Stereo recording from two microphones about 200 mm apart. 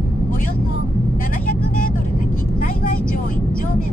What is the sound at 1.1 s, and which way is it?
Vehicle, 45° left (ahead or behind).